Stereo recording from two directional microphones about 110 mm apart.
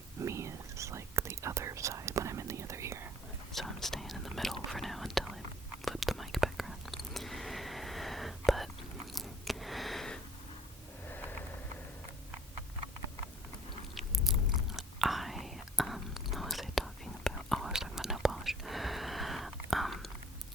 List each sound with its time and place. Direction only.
0.2 s whispering: 25° right (ahead or behind)
3.5 s whispering: centre (ahead or behind)
9.1 s a sound: centre (ahead or behind)
11.1 s vehicle: 15° left (ahead or behind)
13.9 s whispering: centre (ahead or behind)